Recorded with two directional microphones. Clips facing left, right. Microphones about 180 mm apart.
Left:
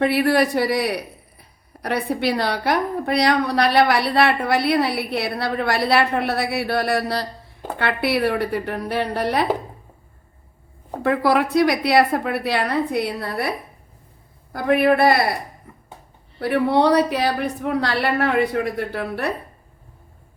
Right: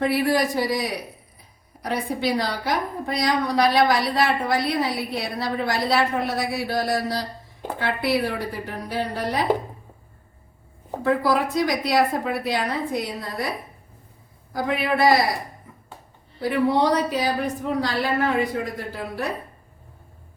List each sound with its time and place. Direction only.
0.0 s a woman's voice: 65° left (ahead or behind)
11.0 s a woman's voice: 65° left (ahead or behind)
14.5 s a woman's voice: 60° left (ahead or behind)
16.4 s a woman's voice: 65° left (ahead or behind)